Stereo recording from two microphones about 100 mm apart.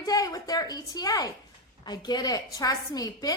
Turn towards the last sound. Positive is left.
turn(degrees=40)  # may be behind; listen again after turning